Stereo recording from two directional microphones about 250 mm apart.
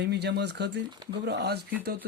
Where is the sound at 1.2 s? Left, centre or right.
Right.